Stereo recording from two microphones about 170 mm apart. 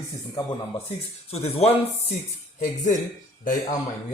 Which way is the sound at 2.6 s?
50° left (ahead or behind).